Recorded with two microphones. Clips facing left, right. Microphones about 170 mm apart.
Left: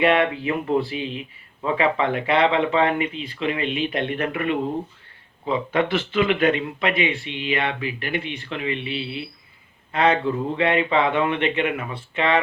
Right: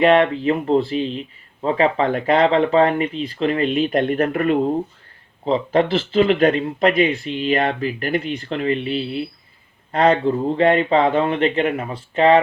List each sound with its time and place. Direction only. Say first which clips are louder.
0.0 s speech: right 5 dB; 35° right (ahead or behind)